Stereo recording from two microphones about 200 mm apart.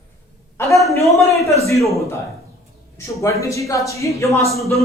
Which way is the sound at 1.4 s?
15° left (ahead or behind).